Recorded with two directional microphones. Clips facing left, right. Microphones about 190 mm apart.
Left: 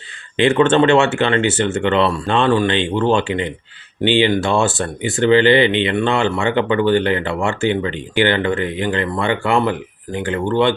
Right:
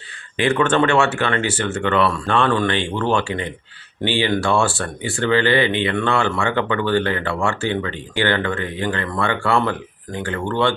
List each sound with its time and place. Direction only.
0.3 s speech: 25° left (ahead or behind)